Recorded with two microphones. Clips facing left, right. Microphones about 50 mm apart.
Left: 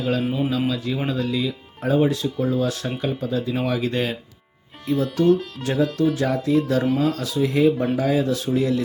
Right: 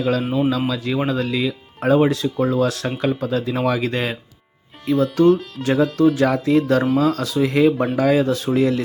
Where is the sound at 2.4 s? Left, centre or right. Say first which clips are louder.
Right 4 dB; right.